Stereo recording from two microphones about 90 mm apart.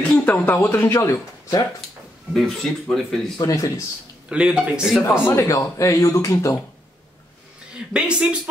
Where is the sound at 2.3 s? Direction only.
5° left (ahead or behind).